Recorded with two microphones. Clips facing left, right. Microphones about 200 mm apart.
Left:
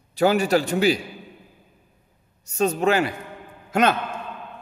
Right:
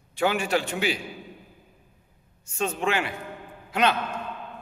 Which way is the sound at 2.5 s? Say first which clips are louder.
Left 6 dB; 40° left (ahead or behind).